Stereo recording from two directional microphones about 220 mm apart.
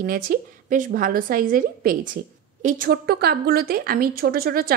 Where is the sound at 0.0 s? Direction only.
40° right (ahead or behind).